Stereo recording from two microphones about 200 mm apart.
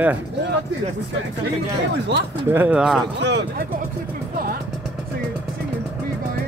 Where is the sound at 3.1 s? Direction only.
60° right (ahead or behind).